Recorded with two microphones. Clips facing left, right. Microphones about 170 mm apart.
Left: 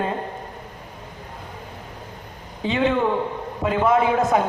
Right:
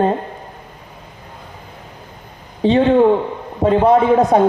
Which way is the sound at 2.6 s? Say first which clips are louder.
Right 9 dB; 35° right (ahead or behind).